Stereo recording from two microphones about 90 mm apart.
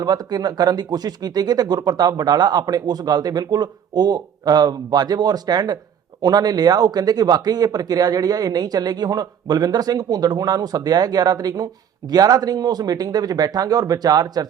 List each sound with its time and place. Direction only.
0.0 s speech: 45° right (ahead or behind)